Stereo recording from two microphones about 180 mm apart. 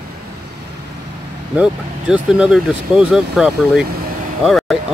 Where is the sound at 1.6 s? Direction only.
5° right (ahead or behind).